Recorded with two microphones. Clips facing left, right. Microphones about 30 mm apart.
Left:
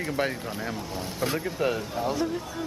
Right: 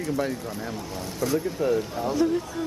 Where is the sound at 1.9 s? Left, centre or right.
Centre.